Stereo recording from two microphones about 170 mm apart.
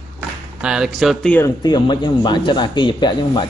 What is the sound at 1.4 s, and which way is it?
Speech, 25° left (ahead or behind).